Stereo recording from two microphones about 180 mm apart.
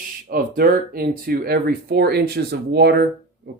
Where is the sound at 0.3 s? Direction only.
55° right (ahead or behind).